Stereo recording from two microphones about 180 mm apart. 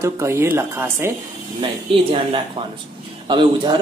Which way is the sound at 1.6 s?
30° right (ahead or behind).